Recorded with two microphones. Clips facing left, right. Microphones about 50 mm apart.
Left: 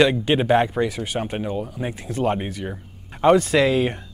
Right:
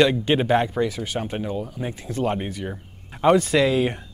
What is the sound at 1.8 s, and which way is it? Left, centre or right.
Speech, left.